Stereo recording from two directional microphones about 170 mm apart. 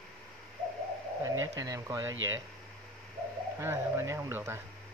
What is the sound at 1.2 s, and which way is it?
Speech, 20° right (ahead or behind).